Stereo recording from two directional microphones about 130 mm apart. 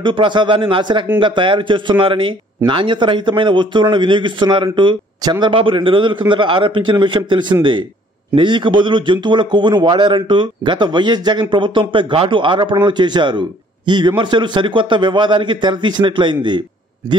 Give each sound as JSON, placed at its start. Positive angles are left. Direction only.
{"t": 0.0, "sound": "speech", "side_deg": -40}